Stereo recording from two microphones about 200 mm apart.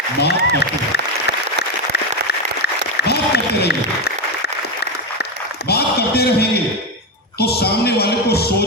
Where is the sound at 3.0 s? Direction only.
55° left (ahead or behind).